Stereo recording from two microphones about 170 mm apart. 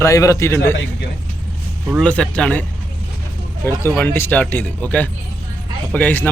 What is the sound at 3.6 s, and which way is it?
A man's voice, 10° left (ahead or behind).